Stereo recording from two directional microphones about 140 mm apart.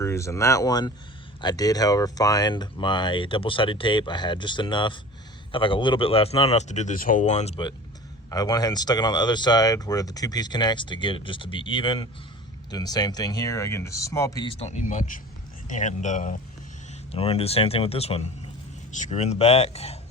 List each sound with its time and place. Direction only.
0.0 s speech: 20° left (ahead or behind); by 7.6 s 50° left (ahead or behind)
8.3 s speech: 25° left (ahead or behind)
14.4 s speech: 45° left (ahead or behind); by 16.4 s 65° left (ahead or behind)
17.1 s speech: 45° left (ahead or behind)
18.9 s speech: 60° left (ahead or behind)